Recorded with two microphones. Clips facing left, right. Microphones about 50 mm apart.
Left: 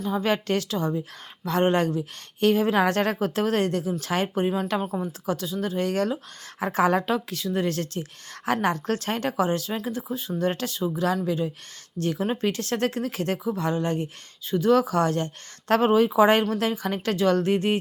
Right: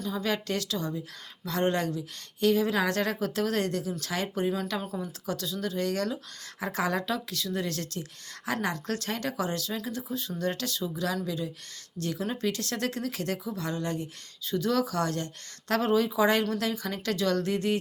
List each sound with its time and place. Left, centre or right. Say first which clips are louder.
0.1 s speech: left 6 dB; left